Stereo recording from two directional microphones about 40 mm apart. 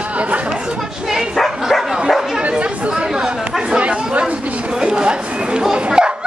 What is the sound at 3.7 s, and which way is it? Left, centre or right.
Chatter, right.